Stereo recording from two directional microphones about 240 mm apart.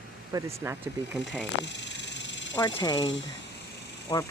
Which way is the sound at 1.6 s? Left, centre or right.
Left.